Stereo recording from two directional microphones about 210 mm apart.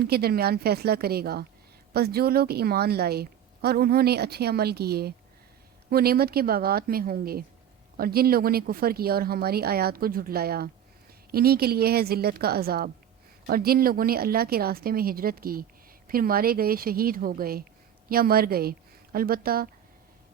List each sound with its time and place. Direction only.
0.0 s a woman's voice: 50° right (ahead or behind)